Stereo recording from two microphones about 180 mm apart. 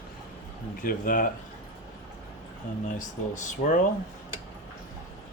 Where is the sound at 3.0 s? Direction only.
45° left (ahead or behind).